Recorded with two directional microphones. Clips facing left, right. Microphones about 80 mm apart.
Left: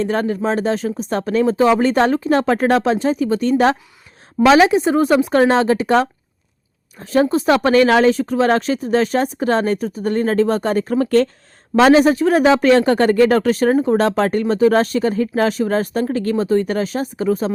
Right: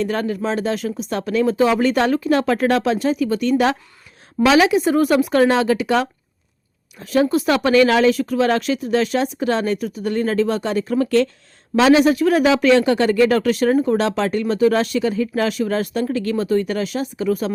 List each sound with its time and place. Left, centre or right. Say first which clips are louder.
0.0 s speech: left 3 dB; left
14.0 s speech: left 3 dB; left